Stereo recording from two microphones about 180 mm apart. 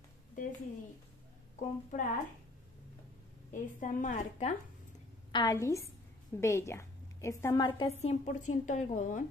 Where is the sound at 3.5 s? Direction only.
45° left (ahead or behind).